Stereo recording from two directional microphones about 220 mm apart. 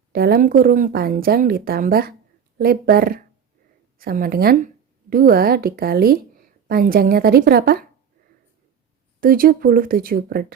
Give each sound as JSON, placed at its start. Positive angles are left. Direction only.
{"t": 0.1, "sound": "a woman's voice", "side_deg": -45}
{"t": 9.2, "sound": "speech", "side_deg": -40}